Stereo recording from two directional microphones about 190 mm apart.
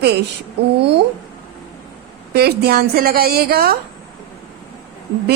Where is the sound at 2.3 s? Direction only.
55° right (ahead or behind).